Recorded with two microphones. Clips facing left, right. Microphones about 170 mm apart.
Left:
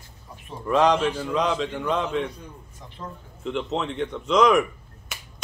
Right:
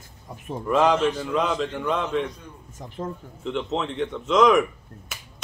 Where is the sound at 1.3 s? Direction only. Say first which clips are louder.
Even; centre (ahead or behind).